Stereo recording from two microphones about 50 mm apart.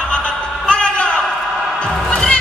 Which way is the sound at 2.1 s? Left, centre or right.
Centre.